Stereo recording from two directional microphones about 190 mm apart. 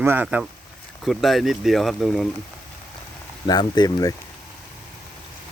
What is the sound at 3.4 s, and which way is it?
Speech, 20° left (ahead or behind).